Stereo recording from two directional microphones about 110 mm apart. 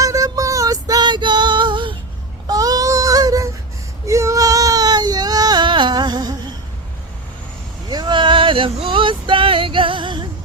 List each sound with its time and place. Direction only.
0.0 s child singing: 30° right (ahead or behind); by 2.0 s 50° right (ahead or behind)
2.5 s child singing: 35° right (ahead or behind)
4.0 s baby cry: 30° right (ahead or behind)
7.9 s male singing: 40° right (ahead or behind)